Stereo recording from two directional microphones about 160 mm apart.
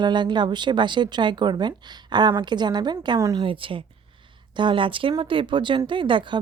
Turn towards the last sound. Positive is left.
turn(degrees=-30)  # may be behind; listen again after turning